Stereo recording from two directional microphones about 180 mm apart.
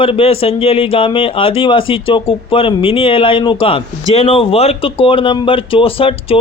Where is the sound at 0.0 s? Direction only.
30° left (ahead or behind).